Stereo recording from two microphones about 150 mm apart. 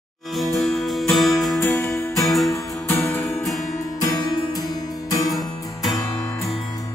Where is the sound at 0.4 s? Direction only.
Centre (ahead or behind).